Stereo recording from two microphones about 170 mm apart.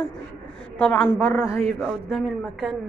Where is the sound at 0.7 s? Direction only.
5° left (ahead or behind).